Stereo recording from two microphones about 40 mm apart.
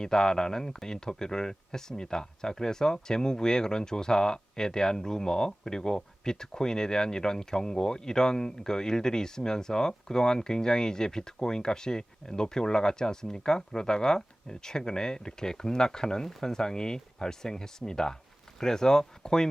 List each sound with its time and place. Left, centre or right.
0.0 s speech: centre